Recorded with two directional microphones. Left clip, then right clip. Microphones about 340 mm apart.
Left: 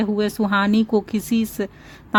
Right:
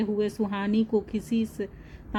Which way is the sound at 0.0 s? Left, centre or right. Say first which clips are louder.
Left 6 dB; left.